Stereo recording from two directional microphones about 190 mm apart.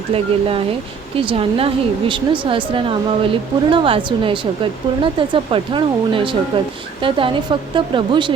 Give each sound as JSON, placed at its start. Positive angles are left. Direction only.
{"t": 0.1, "sound": "speech", "side_deg": -30}